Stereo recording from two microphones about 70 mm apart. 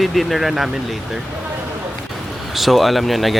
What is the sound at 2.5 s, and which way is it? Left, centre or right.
Speech, centre.